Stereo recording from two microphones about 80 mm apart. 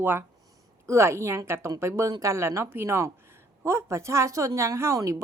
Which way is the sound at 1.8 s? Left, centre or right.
Right.